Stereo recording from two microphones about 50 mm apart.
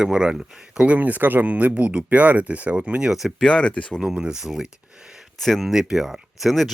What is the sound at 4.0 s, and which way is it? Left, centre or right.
Speech, centre.